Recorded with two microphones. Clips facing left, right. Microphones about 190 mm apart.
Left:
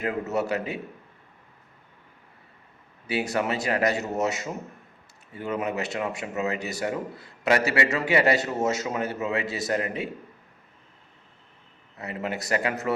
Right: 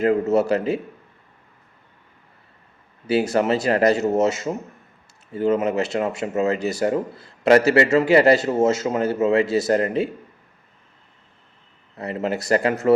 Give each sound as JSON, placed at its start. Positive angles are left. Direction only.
{"t": 0.0, "sound": "a man's voice", "side_deg": -30}
{"t": 3.1, "sound": "a man's voice", "side_deg": -30}
{"t": 11.9, "sound": "speech", "side_deg": -35}